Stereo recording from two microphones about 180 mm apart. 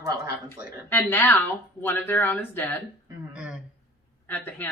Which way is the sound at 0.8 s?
10° left (ahead or behind).